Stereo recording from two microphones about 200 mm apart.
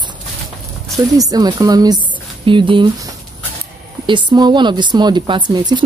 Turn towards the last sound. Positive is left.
turn(degrees=-20)  # may be behind; listen again after turning